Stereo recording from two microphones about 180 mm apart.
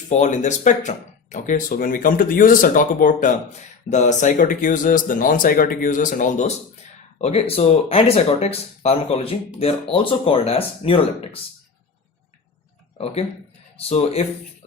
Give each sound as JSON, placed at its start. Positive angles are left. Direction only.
{"t": 0.1, "sound": "speech", "side_deg": 40}
{"t": 13.7, "sound": "speech", "side_deg": 35}